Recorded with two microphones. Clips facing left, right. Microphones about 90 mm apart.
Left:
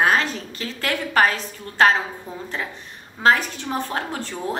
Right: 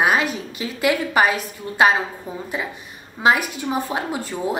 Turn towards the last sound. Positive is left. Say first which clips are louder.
# right 3 dB
turn(degrees=-10)  # may be behind; listen again after turning